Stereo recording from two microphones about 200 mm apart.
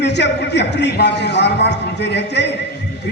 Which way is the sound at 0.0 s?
60° left (ahead or behind).